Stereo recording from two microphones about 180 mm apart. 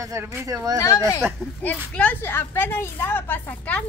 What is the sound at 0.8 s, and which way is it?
A woman's voice, 15° left (ahead or behind).